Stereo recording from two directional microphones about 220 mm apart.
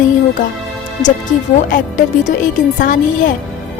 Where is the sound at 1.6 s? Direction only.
35° left (ahead or behind).